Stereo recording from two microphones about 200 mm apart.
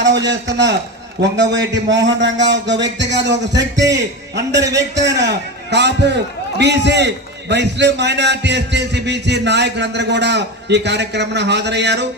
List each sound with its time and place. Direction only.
0.3 s a man's voice: 60° right (ahead or behind)
3.5 s a man's voice: 15° right (ahead or behind)
3.9 s a man's voice: 60° right (ahead or behind)